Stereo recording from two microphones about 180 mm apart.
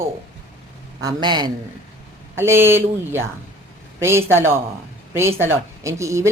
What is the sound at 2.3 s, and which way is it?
Speech, 15° right (ahead or behind).